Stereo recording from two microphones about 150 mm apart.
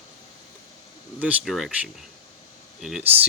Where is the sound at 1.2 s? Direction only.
5° right (ahead or behind).